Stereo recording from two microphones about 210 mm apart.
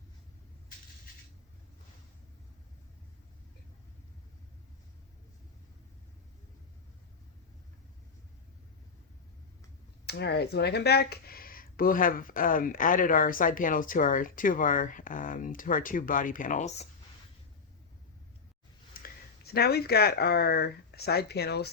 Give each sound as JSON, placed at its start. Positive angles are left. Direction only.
{"t": 10.1, "sound": "speech", "side_deg": 50}
{"t": 18.9, "sound": "speech", "side_deg": 45}